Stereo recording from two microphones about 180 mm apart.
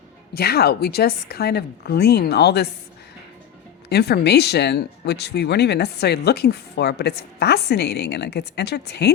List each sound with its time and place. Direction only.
0.3 s speech: 60° left (ahead or behind)
3.8 s speech: 65° left (ahead or behind)